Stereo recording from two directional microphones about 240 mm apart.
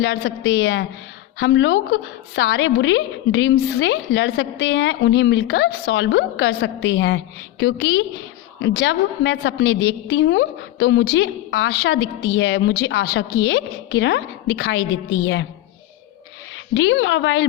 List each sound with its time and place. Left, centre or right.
0.0 s a woman's voice: left
16.7 s a woman's voice: left